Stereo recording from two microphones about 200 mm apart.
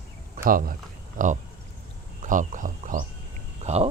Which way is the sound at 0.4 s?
45° right (ahead or behind).